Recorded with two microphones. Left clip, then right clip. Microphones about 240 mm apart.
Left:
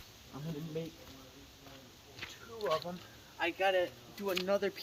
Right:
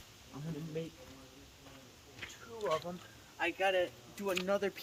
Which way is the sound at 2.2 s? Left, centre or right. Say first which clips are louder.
Left 1 dB; centre.